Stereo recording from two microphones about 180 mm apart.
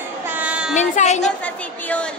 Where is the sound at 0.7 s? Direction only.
40° left (ahead or behind).